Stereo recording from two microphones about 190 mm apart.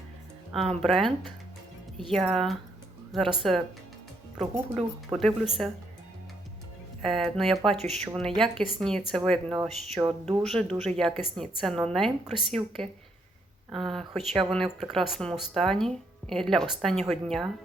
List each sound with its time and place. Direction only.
0.5 s speech: centre (ahead or behind)
4.5 s a woman's voice: 15° right (ahead or behind)
5.1 s speech: centre (ahead or behind)
7.0 s speech: centre (ahead or behind)
7.8 s speech: 35° right (ahead or behind)
8.2 s speech: centre (ahead or behind)
10.0 s a woman's voice: 10° right (ahead or behind)
10.4 s speech: centre (ahead or behind)
10.8 s speech: 35° right (ahead or behind)
11.0 s speech: centre (ahead or behind)